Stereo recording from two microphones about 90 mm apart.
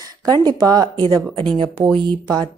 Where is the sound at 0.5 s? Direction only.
45° right (ahead or behind).